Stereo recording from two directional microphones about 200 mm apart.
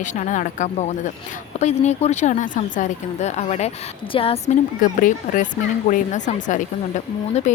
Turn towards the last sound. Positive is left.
turn(degrees=35)  # may be behind; listen again after turning